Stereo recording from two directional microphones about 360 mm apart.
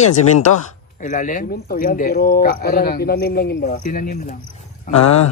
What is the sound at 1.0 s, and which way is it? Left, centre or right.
Speech, left.